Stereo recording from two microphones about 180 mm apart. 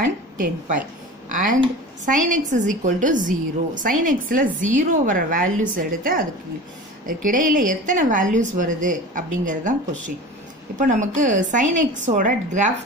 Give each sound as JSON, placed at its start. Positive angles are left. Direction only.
{"t": 1.3, "sound": "a woman's voice", "side_deg": -50}
{"t": 10.8, "sound": "a woman's voice", "side_deg": -45}